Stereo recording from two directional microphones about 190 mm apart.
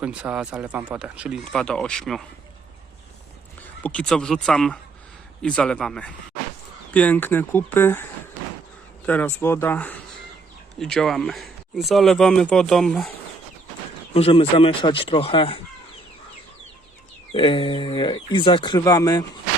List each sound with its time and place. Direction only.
0.0 s speech: 5° right (ahead or behind)
1.5 s speech: 5° left (ahead or behind)
3.8 s speech: 5° left (ahead or behind)
9.0 s speech: 10° left (ahead or behind)
14.1 s speech: 30° left (ahead or behind)
17.3 s speech: 25° left (ahead or behind)